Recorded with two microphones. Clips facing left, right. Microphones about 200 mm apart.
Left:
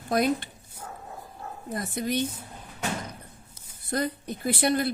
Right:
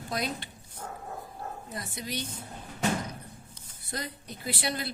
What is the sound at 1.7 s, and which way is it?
Speech, 50° left (ahead or behind).